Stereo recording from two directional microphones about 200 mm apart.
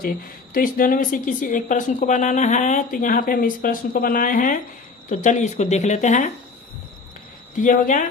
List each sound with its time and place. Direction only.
0.5 s a woman's voice: 45° left (ahead or behind)
7.5 s a woman's voice: 40° left (ahead or behind)